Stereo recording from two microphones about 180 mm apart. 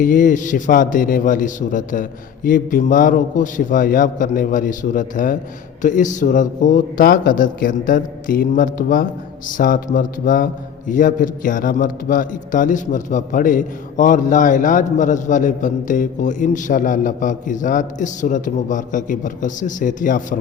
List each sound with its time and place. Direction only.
0.0 s a man's voice: 45° left (ahead or behind)